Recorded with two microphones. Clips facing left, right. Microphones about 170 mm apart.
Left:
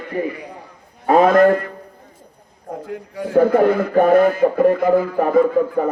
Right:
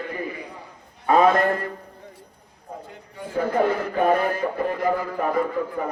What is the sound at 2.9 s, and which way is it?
Speech, 70° left (ahead or behind).